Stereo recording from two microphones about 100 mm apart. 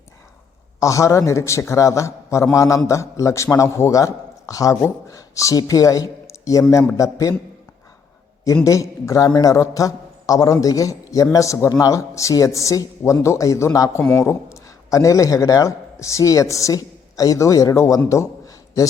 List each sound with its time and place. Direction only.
0.8 s a man's voice: 30° left (ahead or behind)
8.6 s a man's voice: 35° left (ahead or behind)